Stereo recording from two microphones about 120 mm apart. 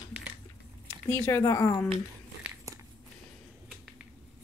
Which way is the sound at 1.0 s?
20° left (ahead or behind).